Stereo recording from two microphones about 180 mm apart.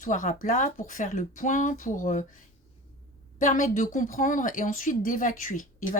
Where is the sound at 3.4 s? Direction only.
45° left (ahead or behind).